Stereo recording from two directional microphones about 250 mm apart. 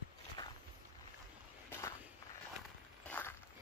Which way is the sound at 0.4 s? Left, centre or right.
Centre.